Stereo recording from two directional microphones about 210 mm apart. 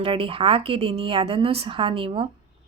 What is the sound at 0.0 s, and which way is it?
A woman's voice, 25° right (ahead or behind).